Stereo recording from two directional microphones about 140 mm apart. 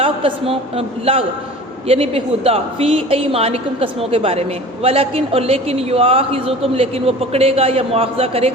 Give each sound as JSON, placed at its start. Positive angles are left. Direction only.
{"t": 0.0, "sound": "a woman's voice", "side_deg": -40}